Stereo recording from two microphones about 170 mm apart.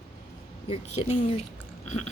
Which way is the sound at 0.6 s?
40° left (ahead or behind).